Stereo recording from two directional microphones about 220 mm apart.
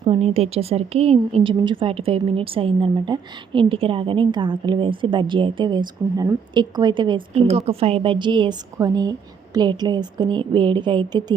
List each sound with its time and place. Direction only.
0.0 s a woman's voice: 25° right (ahead or behind)